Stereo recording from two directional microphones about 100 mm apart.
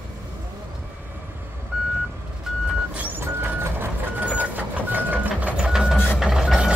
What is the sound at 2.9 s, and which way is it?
Vehicle, 15° right (ahead or behind).